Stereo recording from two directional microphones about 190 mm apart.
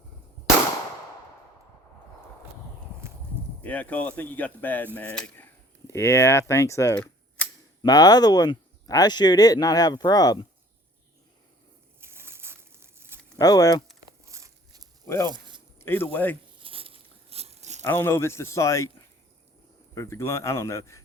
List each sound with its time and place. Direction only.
3.6 s speech: 10° left (ahead or behind)
11.9 s a sound: 15° right (ahead or behind)
13.4 s speech: 20° left (ahead or behind)
14.3 s biting: 15° right (ahead or behind)
15.0 s speech: 15° left (ahead or behind)
15.3 s zipper: 25° right (ahead or behind)
15.8 s speech: 10° left (ahead or behind)
16.6 s crunch: 30° right (ahead or behind)
17.8 s speech: 10° left (ahead or behind)